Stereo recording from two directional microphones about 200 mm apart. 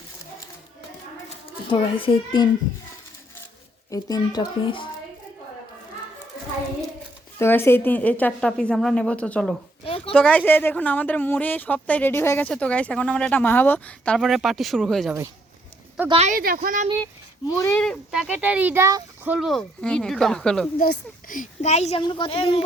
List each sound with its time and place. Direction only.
1.5 s a child's voice: 25° left (ahead or behind)
3.8 s speech: 15° left (ahead or behind)
7.3 s a woman's voice: 10° left (ahead or behind)
9.8 s a sound: 25° left (ahead or behind)
10.2 s a woman's voice: 5° left (ahead or behind)
16.0 s speech: 30° right (ahead or behind)
16.4 s speech: 45° right (ahead or behind)
17.6 s speech: 5° left (ahead or behind)
20.7 s a woman's voice: 45° left (ahead or behind); by 22.6 s 30° left (ahead or behind)